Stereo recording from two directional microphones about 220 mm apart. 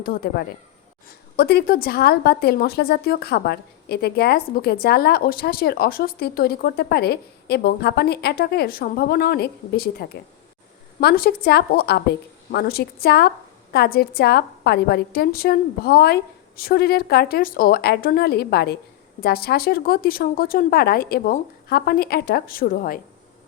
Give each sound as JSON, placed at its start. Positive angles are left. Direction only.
{"t": 0.0, "sound": "a woman's voice", "side_deg": 45}